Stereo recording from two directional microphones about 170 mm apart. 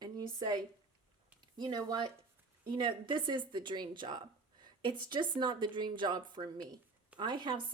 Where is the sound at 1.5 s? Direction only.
25° right (ahead or behind).